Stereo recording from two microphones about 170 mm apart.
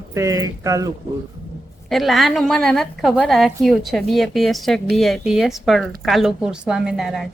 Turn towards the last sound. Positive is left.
turn(degrees=0)  # may be behind; listen again after turning